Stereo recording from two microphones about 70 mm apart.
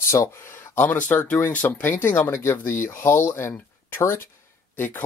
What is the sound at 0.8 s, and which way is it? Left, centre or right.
Speech, left.